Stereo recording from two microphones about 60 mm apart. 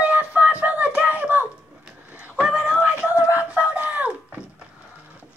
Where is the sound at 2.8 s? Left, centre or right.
Right.